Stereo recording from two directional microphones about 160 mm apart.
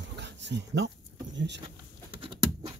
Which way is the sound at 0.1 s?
90° right.